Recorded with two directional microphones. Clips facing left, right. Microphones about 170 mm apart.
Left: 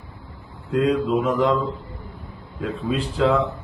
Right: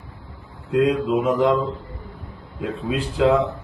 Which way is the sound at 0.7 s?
Centre (ahead or behind).